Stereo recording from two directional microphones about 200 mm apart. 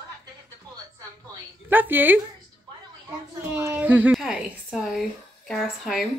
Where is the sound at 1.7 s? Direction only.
10° right (ahead or behind).